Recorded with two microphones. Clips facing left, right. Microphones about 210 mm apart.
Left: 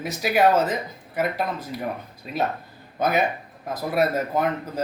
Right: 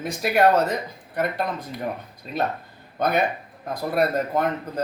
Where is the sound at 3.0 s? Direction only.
5° left (ahead or behind).